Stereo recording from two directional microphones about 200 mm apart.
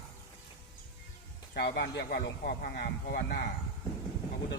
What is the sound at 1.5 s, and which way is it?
Speech, 55° left (ahead or behind).